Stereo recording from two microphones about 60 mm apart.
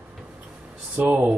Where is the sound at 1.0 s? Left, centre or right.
Right.